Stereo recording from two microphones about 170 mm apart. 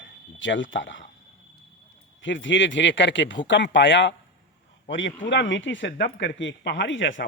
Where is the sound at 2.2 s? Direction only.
90° left.